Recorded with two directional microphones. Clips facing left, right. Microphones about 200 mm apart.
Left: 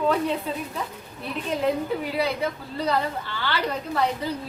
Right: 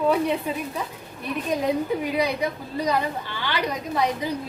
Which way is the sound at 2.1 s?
15° right (ahead or behind).